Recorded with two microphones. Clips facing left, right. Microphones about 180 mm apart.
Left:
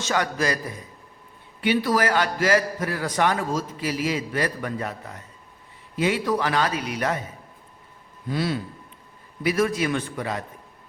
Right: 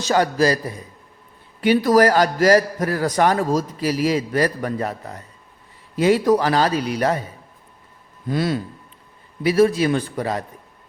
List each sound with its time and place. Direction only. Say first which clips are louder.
0.0 s a man's voice: right 7 dB; 35° right (ahead or behind)
1.6 s a man's voice: right 7 dB; 40° right (ahead or behind)
8.3 s speech: right 4 dB; 45° right (ahead or behind)
9.4 s a man's voice: right 6 dB; 30° right (ahead or behind)